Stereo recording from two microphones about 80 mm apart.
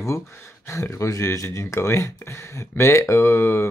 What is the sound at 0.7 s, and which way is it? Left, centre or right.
Speech, left.